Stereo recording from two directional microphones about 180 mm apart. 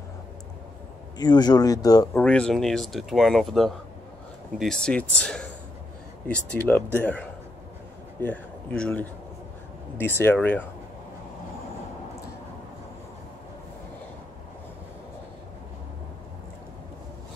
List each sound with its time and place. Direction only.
1.1 s speech: 20° left (ahead or behind)
2.2 s speech: 5° left (ahead or behind)